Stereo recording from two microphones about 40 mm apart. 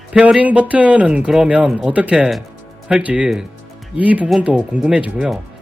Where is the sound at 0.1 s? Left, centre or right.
Right.